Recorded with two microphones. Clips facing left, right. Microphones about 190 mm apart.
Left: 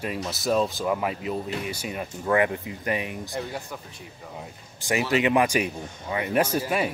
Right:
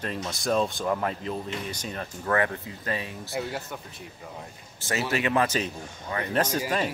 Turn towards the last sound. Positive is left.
turn(degrees=10)  # may be behind; listen again after turning